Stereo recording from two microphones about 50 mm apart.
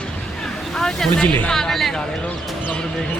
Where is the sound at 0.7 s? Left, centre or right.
Centre.